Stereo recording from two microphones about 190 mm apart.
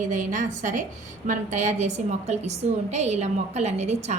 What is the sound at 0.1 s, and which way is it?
A woman's voice, 40° right (ahead or behind).